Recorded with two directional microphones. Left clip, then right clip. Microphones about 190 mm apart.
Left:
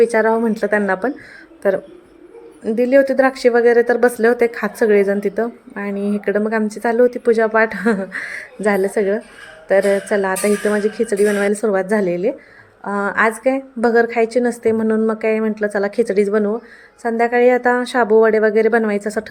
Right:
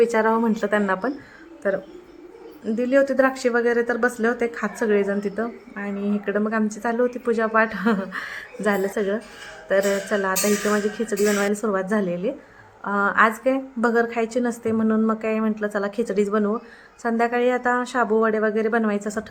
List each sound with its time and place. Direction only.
0.0 s a woman's voice: 15° left (ahead or behind)